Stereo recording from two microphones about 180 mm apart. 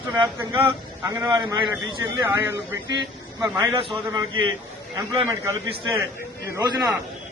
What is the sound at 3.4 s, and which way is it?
A man's voice, 15° right (ahead or behind).